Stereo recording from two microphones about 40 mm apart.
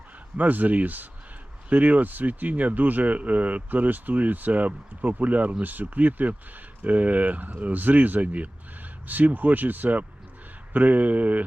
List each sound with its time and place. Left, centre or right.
0.3 s speech: right